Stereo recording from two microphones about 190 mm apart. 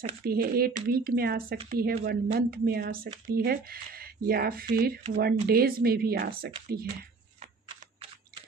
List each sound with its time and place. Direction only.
0.2 s speech: 50° right (ahead or behind)